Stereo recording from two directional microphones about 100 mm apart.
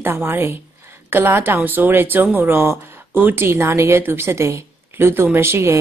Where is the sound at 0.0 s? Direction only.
20° right (ahead or behind).